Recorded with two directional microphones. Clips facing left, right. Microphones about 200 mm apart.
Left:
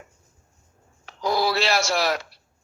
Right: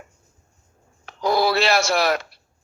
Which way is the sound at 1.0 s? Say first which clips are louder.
Right 3 dB; 60° right (ahead or behind).